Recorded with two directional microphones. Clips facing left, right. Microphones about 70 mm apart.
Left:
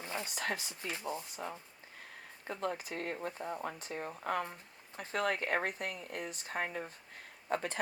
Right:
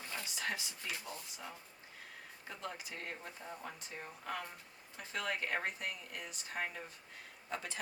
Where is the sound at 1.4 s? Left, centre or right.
Left.